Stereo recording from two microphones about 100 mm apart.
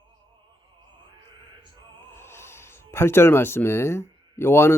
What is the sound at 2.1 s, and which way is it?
Speech, 25° left (ahead or behind).